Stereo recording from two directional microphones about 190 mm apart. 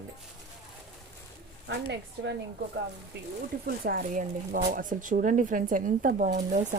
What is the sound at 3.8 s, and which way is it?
Speech, 50° right (ahead or behind).